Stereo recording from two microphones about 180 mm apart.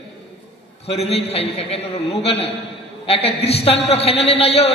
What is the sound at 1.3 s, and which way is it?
A man's voice, 35° left (ahead or behind).